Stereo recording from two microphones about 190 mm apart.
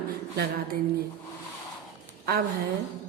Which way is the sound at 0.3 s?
55° right (ahead or behind).